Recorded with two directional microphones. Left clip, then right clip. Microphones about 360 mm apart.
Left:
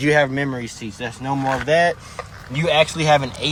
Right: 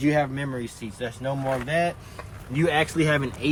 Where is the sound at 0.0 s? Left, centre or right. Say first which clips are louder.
Left 7 dB; left.